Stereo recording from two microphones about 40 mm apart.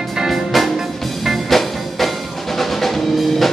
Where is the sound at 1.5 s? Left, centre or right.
Centre.